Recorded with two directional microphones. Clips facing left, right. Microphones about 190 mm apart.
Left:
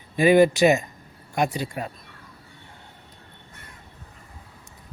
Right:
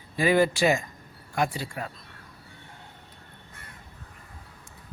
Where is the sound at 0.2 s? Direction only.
20° left (ahead or behind).